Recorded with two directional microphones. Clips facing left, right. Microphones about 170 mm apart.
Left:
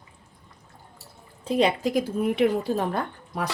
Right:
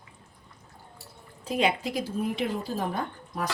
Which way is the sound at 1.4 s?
30° left (ahead or behind).